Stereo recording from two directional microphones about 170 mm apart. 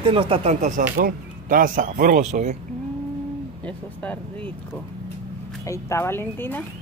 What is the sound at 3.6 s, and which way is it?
Speech, 10° left (ahead or behind).